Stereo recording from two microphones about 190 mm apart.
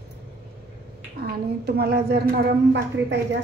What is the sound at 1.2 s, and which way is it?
A woman's voice, 55° right (ahead or behind).